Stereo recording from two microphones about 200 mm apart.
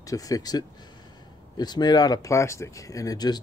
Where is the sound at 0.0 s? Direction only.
15° left (ahead or behind).